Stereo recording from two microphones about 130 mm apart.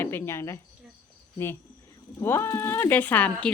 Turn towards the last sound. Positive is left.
turn(degrees=10)  # may be behind; listen again after turning